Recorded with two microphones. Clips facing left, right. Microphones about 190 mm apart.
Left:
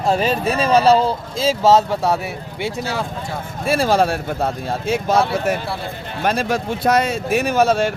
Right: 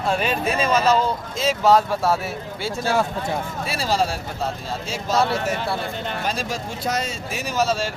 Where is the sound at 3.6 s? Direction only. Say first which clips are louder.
Left 8 dB; 50° left (ahead or behind).